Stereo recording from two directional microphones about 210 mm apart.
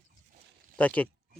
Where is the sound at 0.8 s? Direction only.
5° left (ahead or behind).